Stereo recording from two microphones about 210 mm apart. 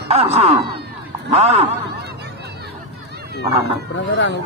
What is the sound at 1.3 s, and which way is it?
Speech, 30° right (ahead or behind).